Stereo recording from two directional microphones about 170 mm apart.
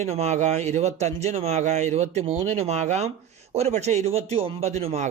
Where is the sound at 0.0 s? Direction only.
40° right (ahead or behind).